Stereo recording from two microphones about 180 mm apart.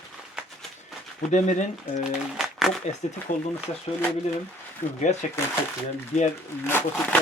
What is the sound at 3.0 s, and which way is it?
Speech, 40° left (ahead or behind).